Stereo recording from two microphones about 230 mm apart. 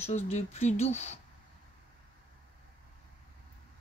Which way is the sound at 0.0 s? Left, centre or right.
Left.